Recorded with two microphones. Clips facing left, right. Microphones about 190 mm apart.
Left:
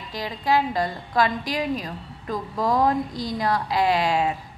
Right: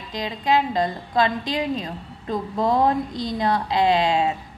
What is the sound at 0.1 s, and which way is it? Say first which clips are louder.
A woman's voice: right 1 dB; 20° right (ahead or behind).